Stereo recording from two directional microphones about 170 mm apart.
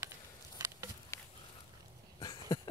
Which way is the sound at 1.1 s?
15° left (ahead or behind).